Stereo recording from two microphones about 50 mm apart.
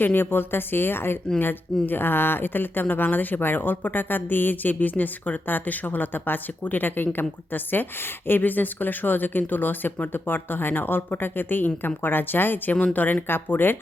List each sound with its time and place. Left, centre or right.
0.0 s a woman's voice: left